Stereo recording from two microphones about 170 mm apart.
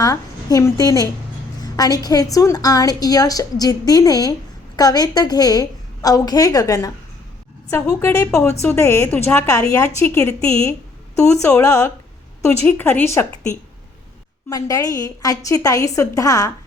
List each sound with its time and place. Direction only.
0.0 s a woman's voice: 20° left (ahead or behind)